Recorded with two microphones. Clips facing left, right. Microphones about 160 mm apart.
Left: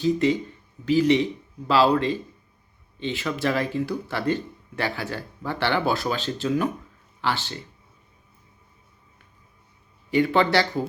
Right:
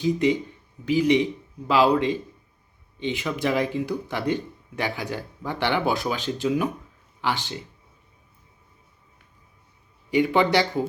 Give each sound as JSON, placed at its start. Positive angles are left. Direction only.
{"t": 0.0, "sound": "speech", "side_deg": -15}
{"t": 10.1, "sound": "speech", "side_deg": -15}